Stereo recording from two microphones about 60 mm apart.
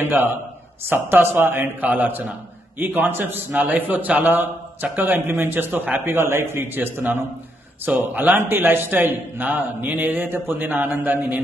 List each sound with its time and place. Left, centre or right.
0.0 s a man's voice: right
8.4 s a man's voice: right